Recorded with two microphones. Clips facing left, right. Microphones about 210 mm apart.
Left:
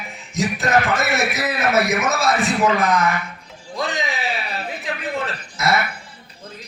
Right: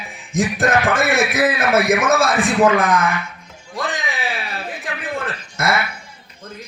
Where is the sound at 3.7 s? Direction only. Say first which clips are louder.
Even; 50° right (ahead or behind).